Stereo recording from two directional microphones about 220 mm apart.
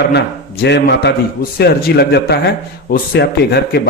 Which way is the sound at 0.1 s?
50° left (ahead or behind).